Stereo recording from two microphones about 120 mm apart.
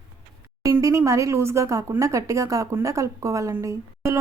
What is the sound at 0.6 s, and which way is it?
Speech, 25° right (ahead or behind).